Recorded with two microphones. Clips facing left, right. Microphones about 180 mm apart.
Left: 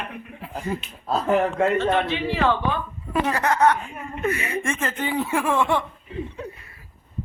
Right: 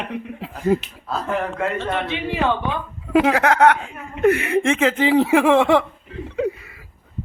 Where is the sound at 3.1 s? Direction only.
90° right.